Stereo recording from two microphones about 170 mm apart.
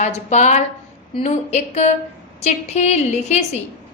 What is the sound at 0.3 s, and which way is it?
A woman's voice, 45° left (ahead or behind).